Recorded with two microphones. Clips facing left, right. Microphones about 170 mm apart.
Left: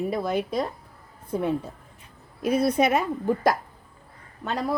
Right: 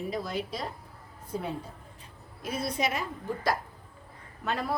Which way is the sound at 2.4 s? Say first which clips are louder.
Left 10 dB; 65° left (ahead or behind).